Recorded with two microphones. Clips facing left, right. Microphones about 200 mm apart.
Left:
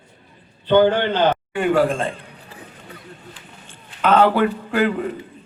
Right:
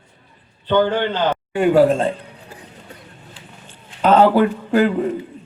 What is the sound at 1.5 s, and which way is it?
Speech, 40° right (ahead or behind).